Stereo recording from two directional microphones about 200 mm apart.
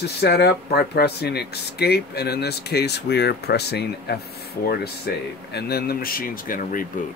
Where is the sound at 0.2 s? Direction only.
55° left (ahead or behind).